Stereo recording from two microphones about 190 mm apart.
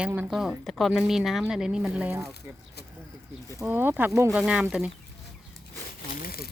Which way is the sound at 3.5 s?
15° right (ahead or behind).